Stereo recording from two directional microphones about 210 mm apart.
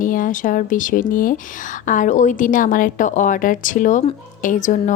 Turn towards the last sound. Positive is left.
turn(degrees=35)  # may be behind; listen again after turning